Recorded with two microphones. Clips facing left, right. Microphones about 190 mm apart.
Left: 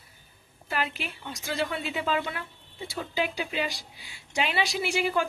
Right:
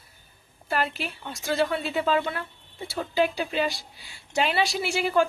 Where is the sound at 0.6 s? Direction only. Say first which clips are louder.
Right 4 dB; 40° right (ahead or behind).